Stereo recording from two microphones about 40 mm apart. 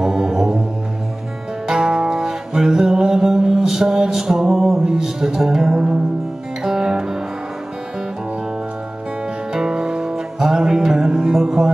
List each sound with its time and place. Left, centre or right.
0.0 s music: centre
1.7 s music: centre
3.0 s mantra: centre
6.6 s music: centre
9.5 s music: centre